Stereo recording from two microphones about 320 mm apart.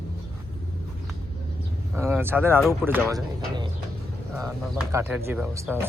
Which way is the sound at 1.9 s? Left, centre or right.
Centre.